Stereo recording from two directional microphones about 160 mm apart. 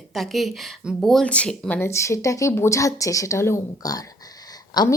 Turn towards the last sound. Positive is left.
turn(degrees=25)  # may be behind; listen again after turning